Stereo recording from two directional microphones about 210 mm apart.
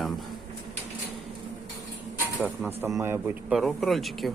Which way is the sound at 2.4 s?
10° right (ahead or behind).